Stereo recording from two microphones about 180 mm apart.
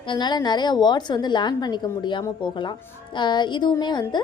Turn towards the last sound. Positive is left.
turn(degrees=25)  # may be behind; listen again after turning